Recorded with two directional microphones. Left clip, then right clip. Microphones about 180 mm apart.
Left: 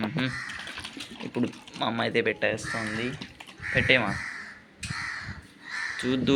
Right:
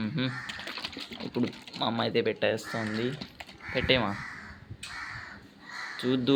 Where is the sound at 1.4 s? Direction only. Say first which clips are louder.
Left 2 dB; 10° right (ahead or behind).